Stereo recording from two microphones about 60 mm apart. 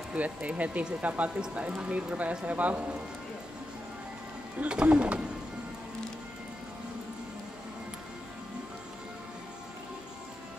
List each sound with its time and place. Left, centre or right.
0.1 s speech: right
4.6 s speech: centre